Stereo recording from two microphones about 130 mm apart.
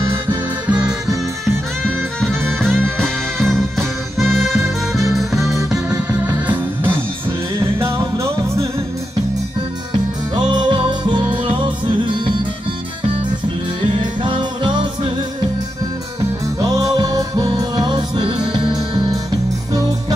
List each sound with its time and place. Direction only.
0.7 s music: 10° right (ahead or behind)
1.4 s music: 5° left (ahead or behind); by 8.6 s 20° right (ahead or behind)
10.3 s music: 35° right (ahead or behind)
13.7 s music: 40° right (ahead or behind)
16.6 s music: 30° right (ahead or behind)